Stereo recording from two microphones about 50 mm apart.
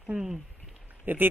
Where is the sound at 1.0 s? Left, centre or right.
Right.